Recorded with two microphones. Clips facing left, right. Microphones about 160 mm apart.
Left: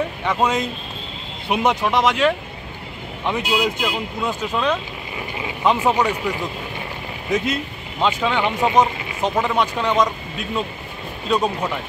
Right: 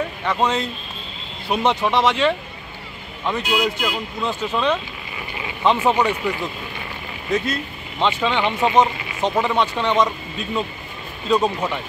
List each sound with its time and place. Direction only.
0.2 s speech: 5° left (ahead or behind)
7.2 s speech: 20° left (ahead or behind)
8.0 s speech: 5° left (ahead or behind)
11.2 s speech: centre (ahead or behind)